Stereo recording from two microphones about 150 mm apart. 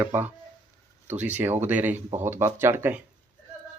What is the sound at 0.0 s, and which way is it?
Speech, 15° right (ahead or behind).